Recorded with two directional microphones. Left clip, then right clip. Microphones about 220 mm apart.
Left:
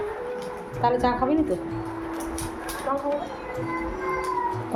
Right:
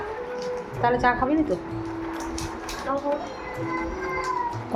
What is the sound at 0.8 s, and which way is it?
Speech, 20° left (ahead or behind).